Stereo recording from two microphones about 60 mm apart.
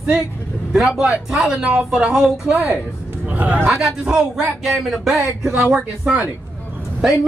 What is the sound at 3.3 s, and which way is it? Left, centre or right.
Speech, right.